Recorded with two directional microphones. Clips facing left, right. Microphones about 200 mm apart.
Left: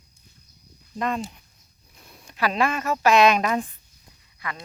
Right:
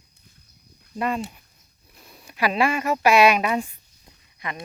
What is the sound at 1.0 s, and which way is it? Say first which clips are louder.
Speech: right 1 dB; 10° right (ahead or behind).